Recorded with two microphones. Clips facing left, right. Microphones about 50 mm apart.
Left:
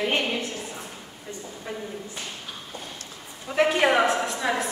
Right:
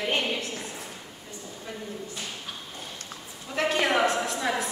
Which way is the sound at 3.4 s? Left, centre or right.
Centre.